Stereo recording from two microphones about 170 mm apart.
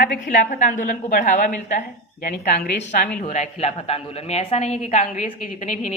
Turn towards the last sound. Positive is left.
turn(degrees=45)  # may be behind; listen again after turning